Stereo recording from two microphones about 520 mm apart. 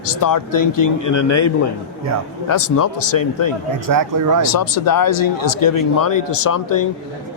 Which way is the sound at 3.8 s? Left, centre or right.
Right.